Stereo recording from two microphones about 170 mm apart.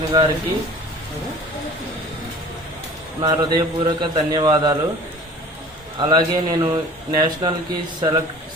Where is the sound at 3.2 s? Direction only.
25° right (ahead or behind).